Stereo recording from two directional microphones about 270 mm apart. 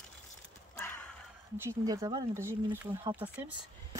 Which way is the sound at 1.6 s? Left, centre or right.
Centre.